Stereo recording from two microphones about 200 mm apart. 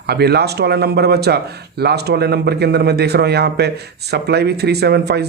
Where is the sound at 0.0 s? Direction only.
55° right (ahead or behind).